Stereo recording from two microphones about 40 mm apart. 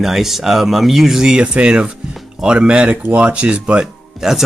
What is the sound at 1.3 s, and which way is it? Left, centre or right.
Speech, right.